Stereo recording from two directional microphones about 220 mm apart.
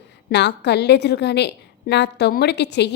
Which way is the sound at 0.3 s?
50° left (ahead or behind).